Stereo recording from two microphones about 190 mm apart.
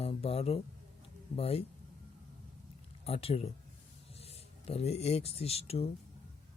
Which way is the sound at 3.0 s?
30° left (ahead or behind).